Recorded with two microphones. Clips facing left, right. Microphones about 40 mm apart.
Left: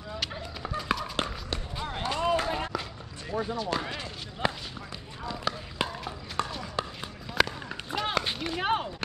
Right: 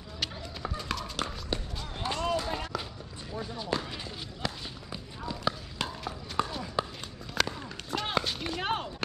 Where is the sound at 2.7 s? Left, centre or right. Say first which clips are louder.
Left 2 dB; centre.